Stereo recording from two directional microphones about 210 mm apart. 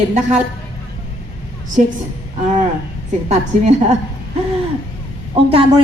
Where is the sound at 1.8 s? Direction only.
35° right (ahead or behind).